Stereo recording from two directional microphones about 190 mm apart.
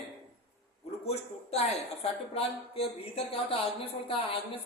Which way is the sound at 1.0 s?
35° left (ahead or behind).